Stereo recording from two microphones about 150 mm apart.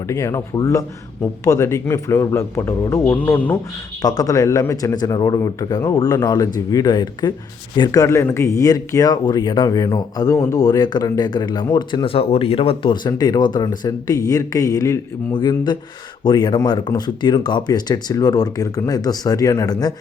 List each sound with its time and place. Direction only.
0.1 s speech: 20° left (ahead or behind)
4.0 s speech: 25° left (ahead or behind)